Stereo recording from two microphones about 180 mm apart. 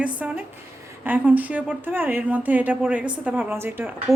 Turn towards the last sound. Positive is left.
turn(degrees=-10)  # may be behind; listen again after turning